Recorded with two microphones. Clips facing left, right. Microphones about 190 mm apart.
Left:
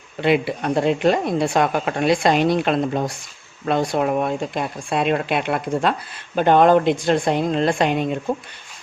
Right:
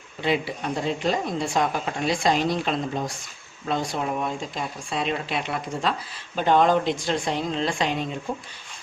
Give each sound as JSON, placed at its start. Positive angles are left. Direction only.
{"t": 0.2, "sound": "a woman's voice", "side_deg": 65}